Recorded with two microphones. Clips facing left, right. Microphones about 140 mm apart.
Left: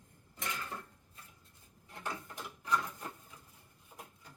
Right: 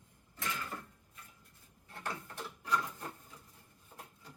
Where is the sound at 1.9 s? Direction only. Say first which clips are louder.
Even; 15° left (ahead or behind).